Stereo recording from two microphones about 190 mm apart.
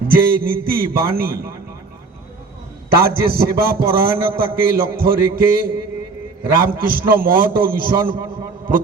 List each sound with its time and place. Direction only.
0.1 s a man's voice: 50° right (ahead or behind)
2.9 s a man's voice: 50° right (ahead or behind)